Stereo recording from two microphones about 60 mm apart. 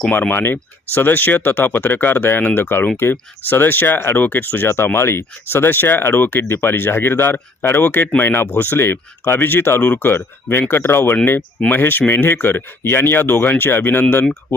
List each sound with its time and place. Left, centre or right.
0.1 s speech: left